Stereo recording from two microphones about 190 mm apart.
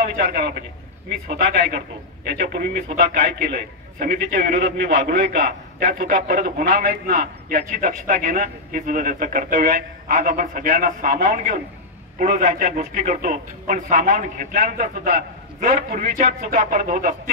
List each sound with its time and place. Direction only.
0.2 s a man's voice: 55° right (ahead or behind)